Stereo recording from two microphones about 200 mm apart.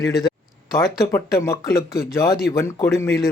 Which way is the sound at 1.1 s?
15° left (ahead or behind).